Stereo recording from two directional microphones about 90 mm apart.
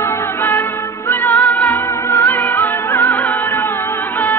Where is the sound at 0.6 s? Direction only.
30° left (ahead or behind).